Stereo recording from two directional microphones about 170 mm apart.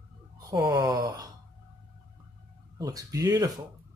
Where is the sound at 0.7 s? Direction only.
20° right (ahead or behind).